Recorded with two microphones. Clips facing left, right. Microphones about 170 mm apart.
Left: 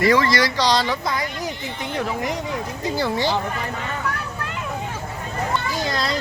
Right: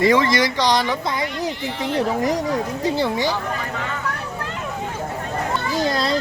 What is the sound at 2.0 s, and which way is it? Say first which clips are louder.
Speech: right 5 dB; 35° right (ahead or behind).